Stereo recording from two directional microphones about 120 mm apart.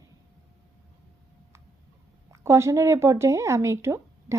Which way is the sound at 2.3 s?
25° right (ahead or behind).